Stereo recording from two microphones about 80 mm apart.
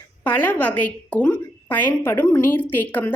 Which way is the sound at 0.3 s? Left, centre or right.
Left.